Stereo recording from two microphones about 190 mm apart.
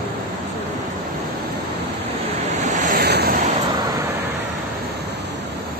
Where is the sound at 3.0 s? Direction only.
60° right (ahead or behind).